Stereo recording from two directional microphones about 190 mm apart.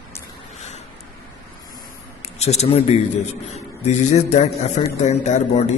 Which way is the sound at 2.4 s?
35° left (ahead or behind).